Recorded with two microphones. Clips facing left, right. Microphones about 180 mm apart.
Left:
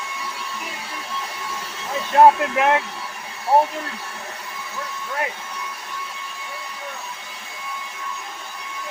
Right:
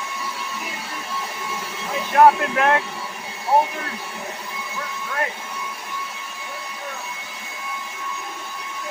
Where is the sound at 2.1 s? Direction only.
20° left (ahead or behind).